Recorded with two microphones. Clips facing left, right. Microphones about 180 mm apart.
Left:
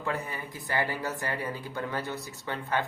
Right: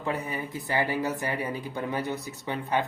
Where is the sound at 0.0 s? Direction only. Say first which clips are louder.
Right 3 dB; 20° right (ahead or behind).